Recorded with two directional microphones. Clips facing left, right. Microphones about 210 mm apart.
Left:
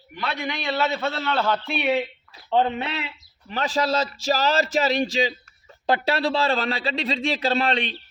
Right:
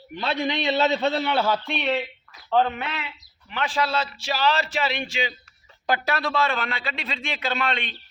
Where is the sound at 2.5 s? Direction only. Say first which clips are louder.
Left 1 dB; 20° left (ahead or behind).